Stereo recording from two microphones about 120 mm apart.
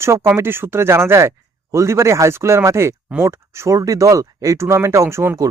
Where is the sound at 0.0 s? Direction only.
20° right (ahead or behind).